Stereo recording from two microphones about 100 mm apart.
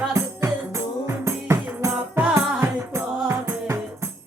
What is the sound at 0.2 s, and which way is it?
Music, 30° right (ahead or behind).